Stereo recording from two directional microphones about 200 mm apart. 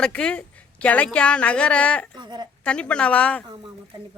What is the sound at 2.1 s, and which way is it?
Speech, 20° right (ahead or behind).